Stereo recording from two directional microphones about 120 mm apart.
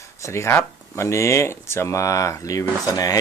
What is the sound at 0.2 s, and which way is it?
Speech, 25° left (ahead or behind).